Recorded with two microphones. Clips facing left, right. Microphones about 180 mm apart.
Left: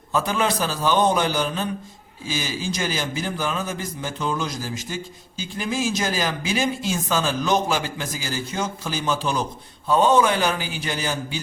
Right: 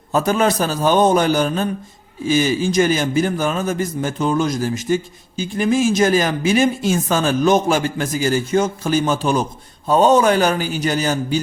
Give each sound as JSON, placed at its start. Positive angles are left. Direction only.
{"t": 0.1, "sound": "a woman's voice", "side_deg": -45}